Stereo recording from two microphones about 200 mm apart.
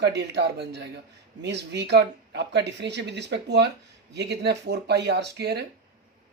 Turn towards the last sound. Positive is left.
turn(degrees=-55)  # may be behind; listen again after turning